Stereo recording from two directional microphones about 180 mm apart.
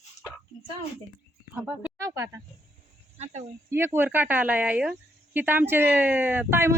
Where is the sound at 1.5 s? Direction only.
10° right (ahead or behind).